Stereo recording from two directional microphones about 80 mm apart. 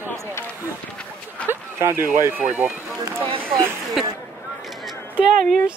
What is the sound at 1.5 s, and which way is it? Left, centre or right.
Speech, right.